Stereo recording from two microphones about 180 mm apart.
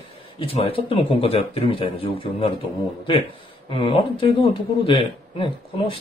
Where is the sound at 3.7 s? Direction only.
30° left (ahead or behind).